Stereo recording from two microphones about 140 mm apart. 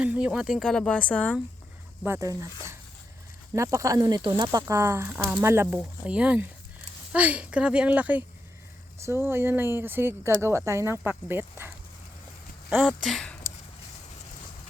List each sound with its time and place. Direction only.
0.0 s speech: 10° right (ahead or behind); by 1.3 s 10° left (ahead or behind)
2.0 s speech: 20° right (ahead or behind)
13.1 s speech: 5° left (ahead or behind)